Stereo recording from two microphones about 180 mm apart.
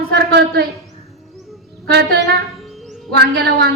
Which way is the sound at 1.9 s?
65° right (ahead or behind).